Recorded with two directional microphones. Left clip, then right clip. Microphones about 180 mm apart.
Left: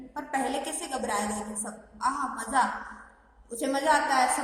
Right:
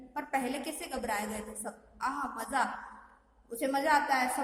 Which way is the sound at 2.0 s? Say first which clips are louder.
Left 6 dB; 45° right (ahead or behind).